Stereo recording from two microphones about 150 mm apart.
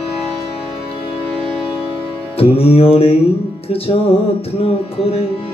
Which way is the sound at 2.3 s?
40° left (ahead or behind).